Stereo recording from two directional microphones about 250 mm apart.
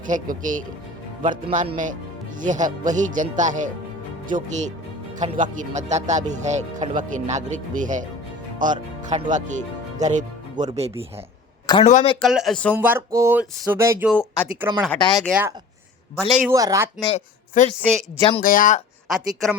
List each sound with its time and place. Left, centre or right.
0.1 s speech: right
5.2 s speech: right
11.6 s a sound: centre
11.9 s speech: left
12.2 s speech: centre
14.1 s speech: centre
14.4 s speech: centre
14.9 s speech: centre
15.2 s speech: centre
17.0 s speech: left
18.4 s speech: left
19.0 s speech: centre